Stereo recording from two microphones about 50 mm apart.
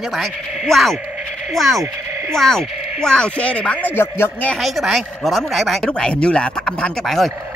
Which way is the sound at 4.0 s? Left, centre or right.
Left.